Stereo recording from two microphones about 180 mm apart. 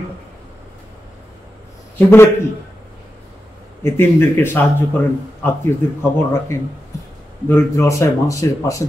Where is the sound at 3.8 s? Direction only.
15° left (ahead or behind).